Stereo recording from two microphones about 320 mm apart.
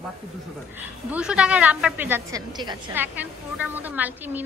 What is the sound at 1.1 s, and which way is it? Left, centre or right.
A woman's voice, centre.